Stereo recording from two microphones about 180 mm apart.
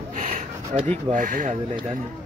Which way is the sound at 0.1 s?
40° right (ahead or behind).